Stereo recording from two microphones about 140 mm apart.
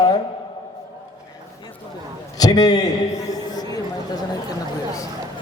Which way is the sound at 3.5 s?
25° left (ahead or behind).